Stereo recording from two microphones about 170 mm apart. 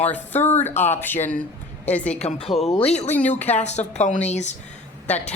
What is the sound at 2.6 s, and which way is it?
A woman's voice, 35° left (ahead or behind).